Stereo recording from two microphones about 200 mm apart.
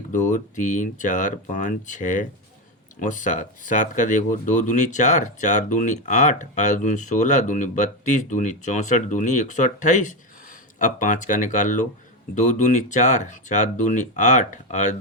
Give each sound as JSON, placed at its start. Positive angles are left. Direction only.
{"t": 0.1, "sound": "speech", "side_deg": 40}